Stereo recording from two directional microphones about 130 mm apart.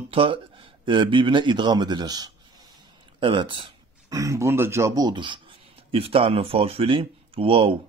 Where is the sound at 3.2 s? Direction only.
40° right (ahead or behind).